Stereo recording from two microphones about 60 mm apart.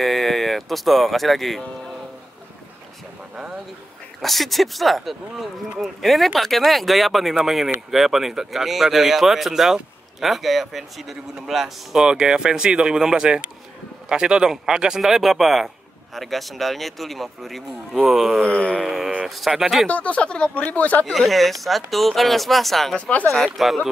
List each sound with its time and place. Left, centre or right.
0.0 s speech: centre
4.2 s speech: centre
17.9 s speech: centre
18.4 s a sound: centre
18.8 s speech: centre
19.9 s speech: left
21.0 s speech: centre
22.9 s speech: left
23.3 s speech: centre